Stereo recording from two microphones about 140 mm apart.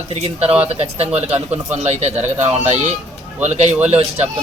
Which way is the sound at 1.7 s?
50° right (ahead or behind).